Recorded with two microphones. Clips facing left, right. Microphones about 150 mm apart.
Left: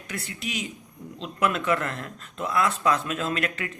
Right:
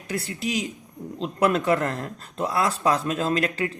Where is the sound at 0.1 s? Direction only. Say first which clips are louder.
Right 6 dB; 35° right (ahead or behind).